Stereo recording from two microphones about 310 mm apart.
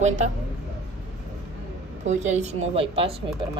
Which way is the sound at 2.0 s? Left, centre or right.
Right.